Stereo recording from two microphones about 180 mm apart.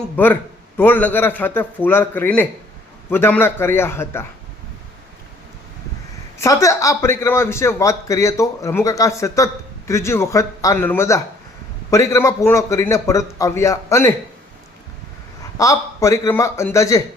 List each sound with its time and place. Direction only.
0.2 s speech: 10° left (ahead or behind)
6.4 s speech: 15° left (ahead or behind)
15.5 s speech: 20° left (ahead or behind)